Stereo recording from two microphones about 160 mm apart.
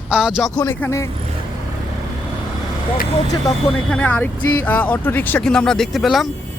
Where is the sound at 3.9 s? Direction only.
10° left (ahead or behind).